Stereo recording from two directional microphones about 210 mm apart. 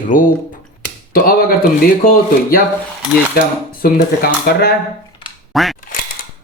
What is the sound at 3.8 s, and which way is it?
Speech, 45° left (ahead or behind).